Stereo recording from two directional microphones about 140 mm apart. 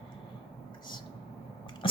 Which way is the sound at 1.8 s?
40° left (ahead or behind).